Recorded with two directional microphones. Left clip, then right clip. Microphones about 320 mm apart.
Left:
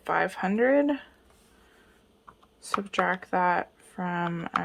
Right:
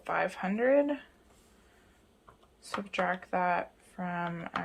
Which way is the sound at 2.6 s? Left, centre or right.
Centre.